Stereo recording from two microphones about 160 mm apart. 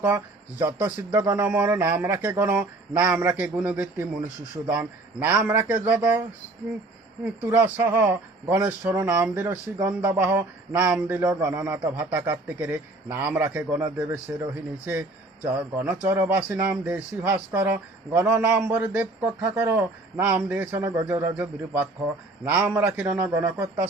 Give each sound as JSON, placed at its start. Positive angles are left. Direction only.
{"t": 0.6, "sound": "speech", "side_deg": -10}
{"t": 1.2, "sound": "speech", "side_deg": -25}
{"t": 1.5, "sound": "speech", "side_deg": -10}
{"t": 7.4, "sound": "speech", "side_deg": -15}